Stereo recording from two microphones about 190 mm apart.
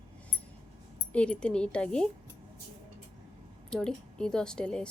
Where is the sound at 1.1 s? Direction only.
5° left (ahead or behind).